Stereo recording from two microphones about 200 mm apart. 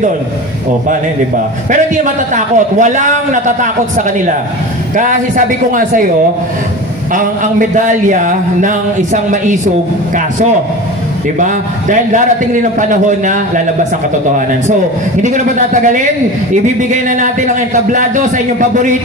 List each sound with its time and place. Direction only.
1.7 s a man's voice: 40° right (ahead or behind)
7.2 s a man's voice: 40° right (ahead or behind)
11.3 s a man's voice: 40° right (ahead or behind)
15.2 s a man's voice: 40° right (ahead or behind)